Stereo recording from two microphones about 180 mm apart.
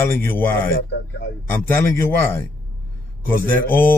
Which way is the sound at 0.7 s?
85° left.